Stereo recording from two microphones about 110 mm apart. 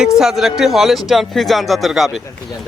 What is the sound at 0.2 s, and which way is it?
A man's voice, 5° right (ahead or behind).